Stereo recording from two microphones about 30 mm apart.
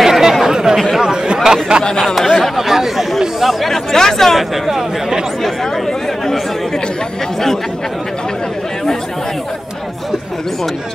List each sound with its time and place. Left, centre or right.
0.0 s chatter: centre
1.0 s chatter: right
1.9 s speech: centre
2.1 s chatter: centre
2.5 s chatter: centre
3.6 s chatter: centre